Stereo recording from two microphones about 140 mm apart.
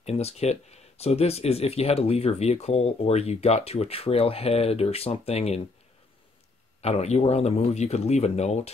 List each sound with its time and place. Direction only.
0.0 s speech: 50° left (ahead or behind)
6.8 s speech: 50° left (ahead or behind)